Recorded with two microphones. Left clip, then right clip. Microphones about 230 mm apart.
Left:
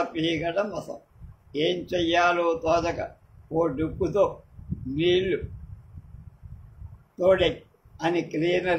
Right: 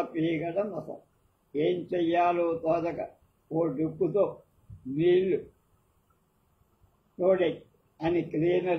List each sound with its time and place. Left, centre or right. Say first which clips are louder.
0.1 s a man's voice: left 3 dB; left
7.2 s a man's voice: left 4 dB; left